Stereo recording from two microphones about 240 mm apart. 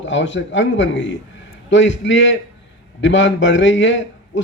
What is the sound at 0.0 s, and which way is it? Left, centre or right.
A man's voice, left.